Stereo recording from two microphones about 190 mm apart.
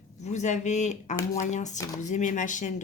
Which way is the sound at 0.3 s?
40° left (ahead or behind).